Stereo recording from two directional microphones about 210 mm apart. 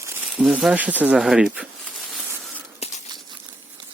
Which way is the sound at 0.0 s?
10° right (ahead or behind).